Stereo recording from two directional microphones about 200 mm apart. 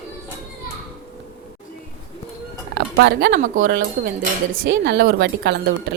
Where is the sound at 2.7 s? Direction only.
55° right (ahead or behind).